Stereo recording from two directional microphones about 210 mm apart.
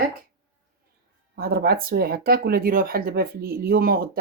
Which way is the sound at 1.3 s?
45° right (ahead or behind).